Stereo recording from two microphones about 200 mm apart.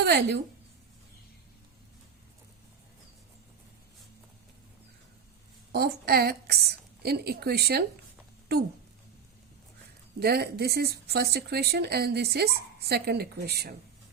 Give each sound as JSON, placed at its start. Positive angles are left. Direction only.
{"t": 0.0, "sound": "a woman's voice", "side_deg": -55}
{"t": 5.7, "sound": "speech", "side_deg": -50}
{"t": 10.2, "sound": "speech", "side_deg": -50}